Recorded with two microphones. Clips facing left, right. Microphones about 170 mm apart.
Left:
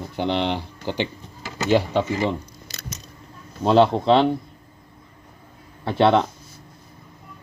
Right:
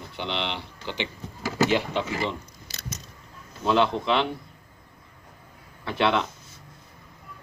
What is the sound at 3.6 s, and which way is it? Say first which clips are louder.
Speech: left 6 dB; 50° left (ahead or behind).